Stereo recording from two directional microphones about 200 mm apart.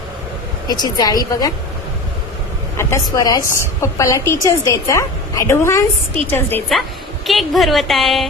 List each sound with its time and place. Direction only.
0.7 s a woman's voice: 20° left (ahead or behind)
2.7 s a woman's voice: 15° left (ahead or behind)
6.7 s a woman's voice: centre (ahead or behind)